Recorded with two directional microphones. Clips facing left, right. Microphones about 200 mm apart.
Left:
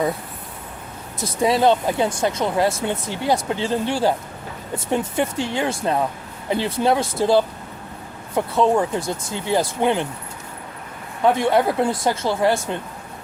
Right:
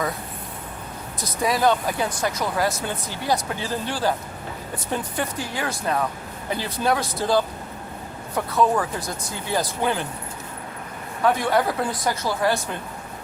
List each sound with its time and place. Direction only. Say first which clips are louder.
1.2 s speech: left 4 dB; 25° left (ahead or behind)
11.2 s speech: left 3 dB; 25° left (ahead or behind)